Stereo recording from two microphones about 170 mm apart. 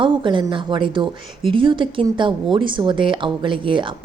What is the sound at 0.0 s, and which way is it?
A woman's voice, 30° right (ahead or behind).